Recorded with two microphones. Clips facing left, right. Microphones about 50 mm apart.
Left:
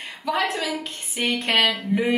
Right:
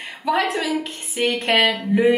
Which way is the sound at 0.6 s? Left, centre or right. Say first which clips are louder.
Right 4 dB; right.